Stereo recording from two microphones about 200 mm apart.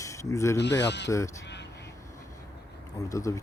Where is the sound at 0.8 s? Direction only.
60° left (ahead or behind).